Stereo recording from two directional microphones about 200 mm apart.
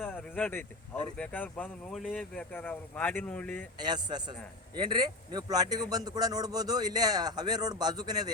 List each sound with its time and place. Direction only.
0.0 s a sound: 10° left (ahead or behind)
1.1 s speech: 5° left (ahead or behind)
3.8 s a man's voice: 20° right (ahead or behind)